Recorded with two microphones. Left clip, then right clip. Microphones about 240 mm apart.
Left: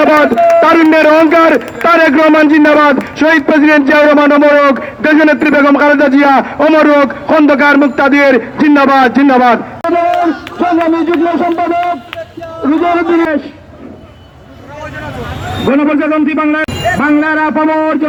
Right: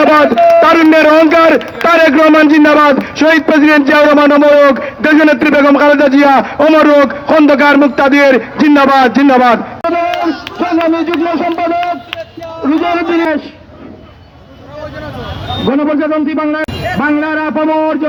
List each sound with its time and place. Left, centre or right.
0.0 s a man's voice: right
15.6 s a man's voice: right